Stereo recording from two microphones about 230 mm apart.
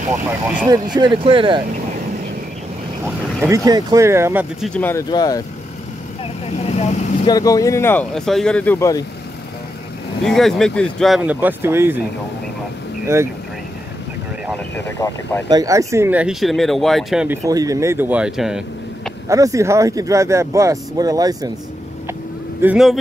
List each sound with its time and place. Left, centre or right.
0.9 s speech: centre
3.3 s speech: centre
6.4 s speech: left
7.2 s speech: centre
10.2 s speech: centre
13.0 s speech: centre
14.5 s speech: centre
15.5 s speech: centre
17.5 s speech: centre
19.2 s speech: centre
22.6 s speech: centre